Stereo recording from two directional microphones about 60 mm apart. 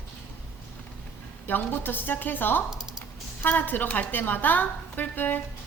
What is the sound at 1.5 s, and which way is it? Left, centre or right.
A woman's voice, left.